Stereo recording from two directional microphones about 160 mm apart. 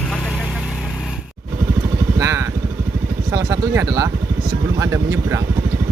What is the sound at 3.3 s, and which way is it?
Speech, 20° right (ahead or behind).